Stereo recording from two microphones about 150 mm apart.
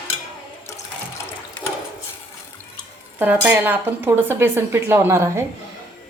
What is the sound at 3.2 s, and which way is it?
Speech, 10° right (ahead or behind).